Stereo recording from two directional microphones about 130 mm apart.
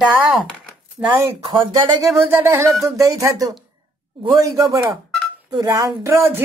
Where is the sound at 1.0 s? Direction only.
20° right (ahead or behind).